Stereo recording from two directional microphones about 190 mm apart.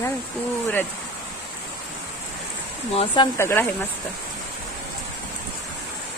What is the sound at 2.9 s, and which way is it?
Speech, 25° left (ahead or behind).